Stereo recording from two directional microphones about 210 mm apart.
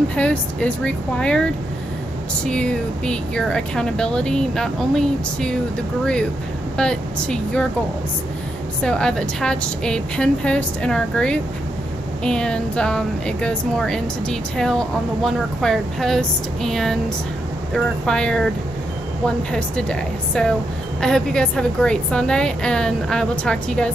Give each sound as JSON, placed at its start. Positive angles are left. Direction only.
{"t": 0.1, "sound": "speech", "side_deg": 5}
{"t": 6.8, "sound": "speech", "side_deg": 5}
{"t": 8.8, "sound": "speech", "side_deg": 5}